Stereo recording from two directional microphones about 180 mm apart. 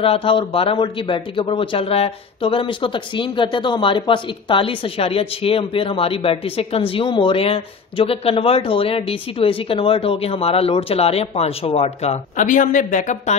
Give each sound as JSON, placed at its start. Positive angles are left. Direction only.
{"t": 0.0, "sound": "a man's voice", "side_deg": 30}